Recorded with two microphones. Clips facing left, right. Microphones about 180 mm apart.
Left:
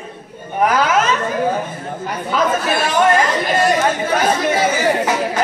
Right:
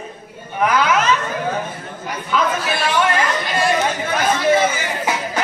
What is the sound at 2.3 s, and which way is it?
Speech, 45° left (ahead or behind).